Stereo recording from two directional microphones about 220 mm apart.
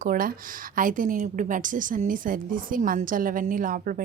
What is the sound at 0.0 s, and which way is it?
A woman's voice, 40° right (ahead or behind).